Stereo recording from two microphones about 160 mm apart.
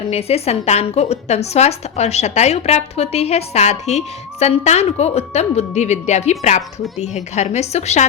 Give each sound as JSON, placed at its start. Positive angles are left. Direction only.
{"t": 0.1, "sound": "a woman's voice", "side_deg": 40}